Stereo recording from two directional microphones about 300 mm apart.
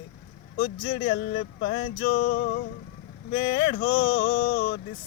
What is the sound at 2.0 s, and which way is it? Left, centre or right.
Music, left.